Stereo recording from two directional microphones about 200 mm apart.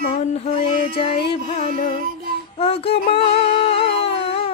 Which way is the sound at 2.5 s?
30° left (ahead or behind).